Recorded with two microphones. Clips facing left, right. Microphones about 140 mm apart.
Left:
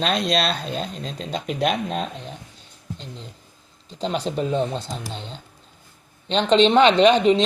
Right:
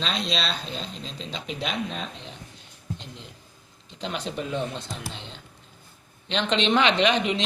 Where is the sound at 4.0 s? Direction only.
35° left (ahead or behind).